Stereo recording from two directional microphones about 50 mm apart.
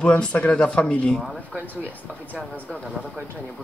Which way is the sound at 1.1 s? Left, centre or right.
Centre.